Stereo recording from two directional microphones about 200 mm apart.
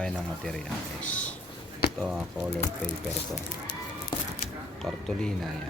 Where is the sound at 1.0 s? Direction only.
5° left (ahead or behind).